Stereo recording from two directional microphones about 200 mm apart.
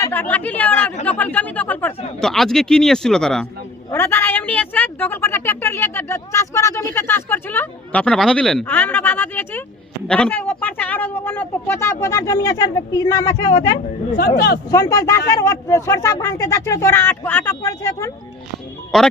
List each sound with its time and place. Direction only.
0.0 s a woman's voice: 10° left (ahead or behind)
14.2 s speech: 50° left (ahead or behind)
14.7 s a woman's voice: 15° left (ahead or behind)
18.9 s speech: centre (ahead or behind)